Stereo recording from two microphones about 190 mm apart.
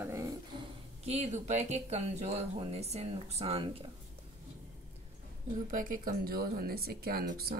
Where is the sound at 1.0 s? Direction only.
35° right (ahead or behind).